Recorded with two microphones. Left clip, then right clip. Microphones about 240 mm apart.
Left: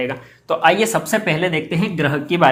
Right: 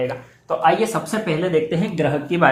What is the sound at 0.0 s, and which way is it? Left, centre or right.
Speech, left.